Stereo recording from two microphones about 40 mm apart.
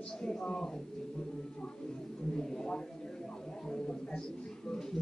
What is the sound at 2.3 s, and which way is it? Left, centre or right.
A man's voice, centre.